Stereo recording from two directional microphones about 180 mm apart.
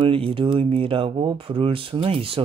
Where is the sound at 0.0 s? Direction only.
30° right (ahead or behind).